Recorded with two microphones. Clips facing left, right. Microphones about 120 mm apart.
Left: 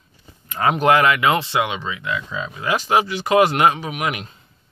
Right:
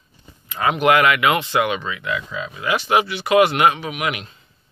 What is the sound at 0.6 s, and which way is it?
Speech, 35° left (ahead or behind).